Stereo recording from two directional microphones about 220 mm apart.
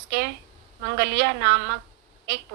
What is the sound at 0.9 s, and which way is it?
Speech, 55° right (ahead or behind).